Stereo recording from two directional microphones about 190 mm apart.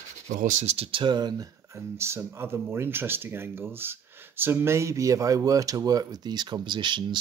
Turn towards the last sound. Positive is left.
turn(degrees=-25)  # may be behind; listen again after turning